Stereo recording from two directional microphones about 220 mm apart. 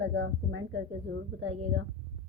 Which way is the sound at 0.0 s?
55° right (ahead or behind).